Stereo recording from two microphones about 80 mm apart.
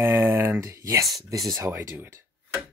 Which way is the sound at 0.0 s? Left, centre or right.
Right.